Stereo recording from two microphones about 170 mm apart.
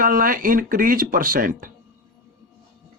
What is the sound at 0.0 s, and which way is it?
Speech, 55° right (ahead or behind).